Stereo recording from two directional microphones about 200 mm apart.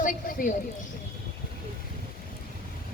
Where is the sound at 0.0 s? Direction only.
40° left (ahead or behind).